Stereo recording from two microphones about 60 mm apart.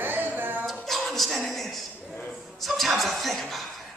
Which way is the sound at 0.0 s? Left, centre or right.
Right.